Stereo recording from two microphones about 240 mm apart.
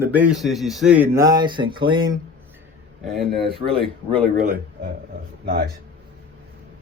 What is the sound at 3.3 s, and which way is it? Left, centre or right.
Speech, right.